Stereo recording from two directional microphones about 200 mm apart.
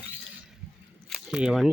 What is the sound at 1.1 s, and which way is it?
Speech, 5° right (ahead or behind).